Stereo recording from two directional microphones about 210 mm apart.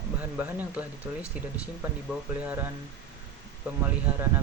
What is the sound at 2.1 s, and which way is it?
Speech, 10° right (ahead or behind).